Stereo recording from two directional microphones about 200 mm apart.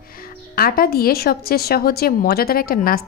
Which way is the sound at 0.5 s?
50° left (ahead or behind).